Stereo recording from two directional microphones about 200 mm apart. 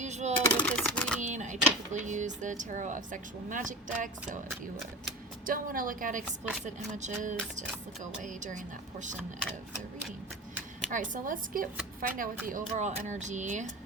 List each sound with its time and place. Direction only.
0.0 s a sound: 35° right (ahead or behind)
0.6 s typewriter: 5° left (ahead or behind)
1.2 s speech: 35° right (ahead or behind)
5.5 s a woman's voice: 45° right (ahead or behind)
10.9 s a woman's voice: 40° right (ahead or behind)